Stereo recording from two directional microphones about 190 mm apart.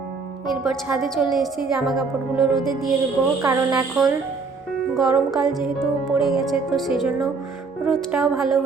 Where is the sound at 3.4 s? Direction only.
20° right (ahead or behind).